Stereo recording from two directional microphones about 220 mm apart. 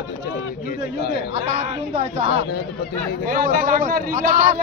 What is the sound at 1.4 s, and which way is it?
Speech, 35° right (ahead or behind).